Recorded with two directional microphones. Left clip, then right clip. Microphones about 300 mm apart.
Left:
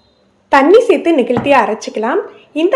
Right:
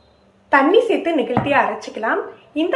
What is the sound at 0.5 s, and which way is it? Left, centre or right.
Speech, left.